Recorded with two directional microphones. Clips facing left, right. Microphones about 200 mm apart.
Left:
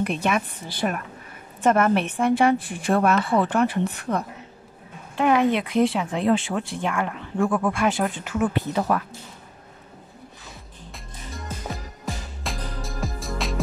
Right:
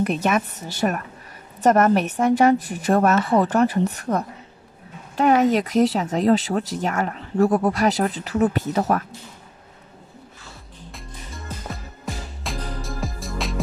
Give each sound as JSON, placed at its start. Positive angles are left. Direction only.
{"t": 0.0, "sound": "a woman's voice", "side_deg": -40}
{"t": 10.9, "sound": "music", "side_deg": 0}